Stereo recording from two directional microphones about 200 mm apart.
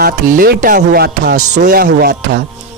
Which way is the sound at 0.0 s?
45° right (ahead or behind).